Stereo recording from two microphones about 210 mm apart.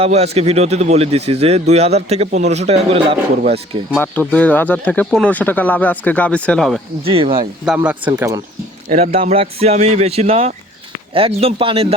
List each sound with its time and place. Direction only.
0.0 s speech: 30° right (ahead or behind)
3.9 s speech: 5° left (ahead or behind)
7.0 s speech: 25° right (ahead or behind)
7.8 s speech: 10° right (ahead or behind)
8.9 s speech: 30° right (ahead or behind)